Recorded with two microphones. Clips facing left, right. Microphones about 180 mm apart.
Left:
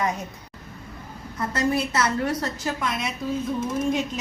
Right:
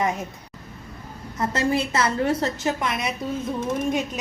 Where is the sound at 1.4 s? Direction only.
25° right (ahead or behind).